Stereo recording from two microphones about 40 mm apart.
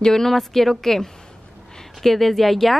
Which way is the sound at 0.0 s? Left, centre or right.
Centre.